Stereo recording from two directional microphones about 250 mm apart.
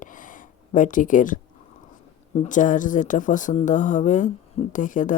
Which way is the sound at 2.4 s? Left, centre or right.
Left.